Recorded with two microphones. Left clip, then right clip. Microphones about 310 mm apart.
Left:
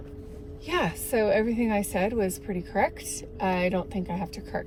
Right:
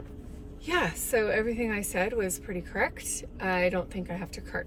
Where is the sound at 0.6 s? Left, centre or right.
Centre.